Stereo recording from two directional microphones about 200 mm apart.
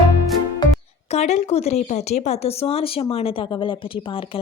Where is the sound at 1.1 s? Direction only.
35° left (ahead or behind).